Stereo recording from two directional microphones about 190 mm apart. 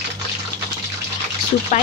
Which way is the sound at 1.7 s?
40° left (ahead or behind).